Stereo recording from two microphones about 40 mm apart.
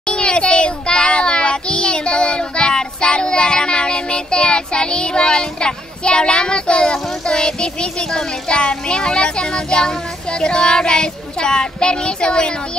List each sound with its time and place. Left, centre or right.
0.0 s child singing: left
10.4 s speech: left